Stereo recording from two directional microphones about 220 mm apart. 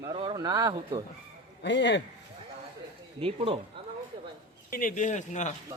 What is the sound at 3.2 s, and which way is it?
Speech, 25° right (ahead or behind).